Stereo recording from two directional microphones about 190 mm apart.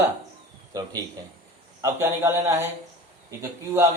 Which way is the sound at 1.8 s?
15° right (ahead or behind).